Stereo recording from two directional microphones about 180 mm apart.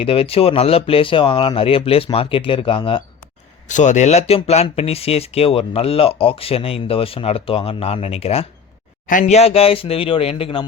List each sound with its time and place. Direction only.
0.0 s speech: 30° left (ahead or behind)
3.7 s speech: 40° left (ahead or behind)